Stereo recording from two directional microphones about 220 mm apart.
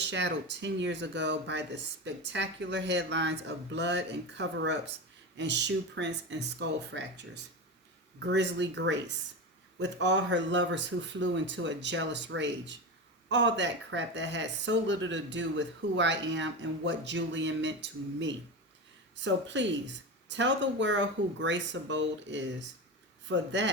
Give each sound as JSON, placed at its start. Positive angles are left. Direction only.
{"t": 0.0, "sound": "speech", "side_deg": -50}